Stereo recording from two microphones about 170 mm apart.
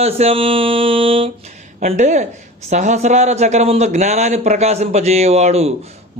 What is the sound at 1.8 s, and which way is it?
A man's voice, 45° right (ahead or behind).